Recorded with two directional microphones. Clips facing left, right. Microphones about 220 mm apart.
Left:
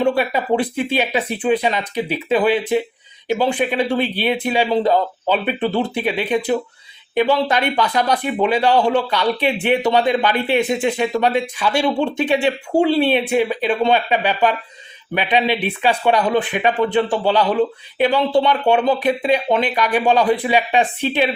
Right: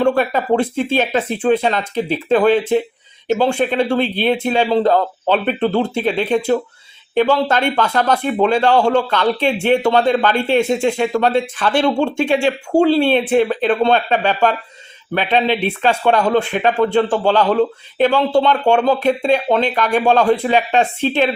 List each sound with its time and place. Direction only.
0.0 s speech: 15° left (ahead or behind)